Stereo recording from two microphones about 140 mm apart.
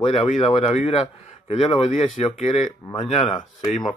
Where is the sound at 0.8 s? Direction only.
45° left (ahead or behind).